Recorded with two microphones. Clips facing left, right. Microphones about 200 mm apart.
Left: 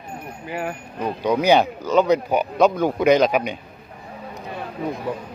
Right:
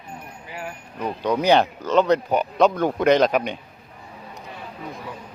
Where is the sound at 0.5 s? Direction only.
60° left (ahead or behind).